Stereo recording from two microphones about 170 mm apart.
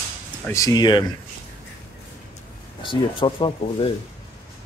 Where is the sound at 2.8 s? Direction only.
30° left (ahead or behind).